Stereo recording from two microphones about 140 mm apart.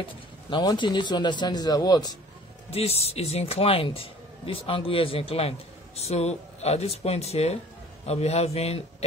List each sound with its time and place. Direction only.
0.5 s a man's voice: 35° left (ahead or behind)
2.7 s speech: 45° left (ahead or behind)